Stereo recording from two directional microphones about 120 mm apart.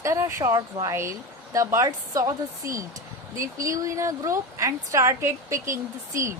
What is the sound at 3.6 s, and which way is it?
A woman's voice, 30° right (ahead or behind).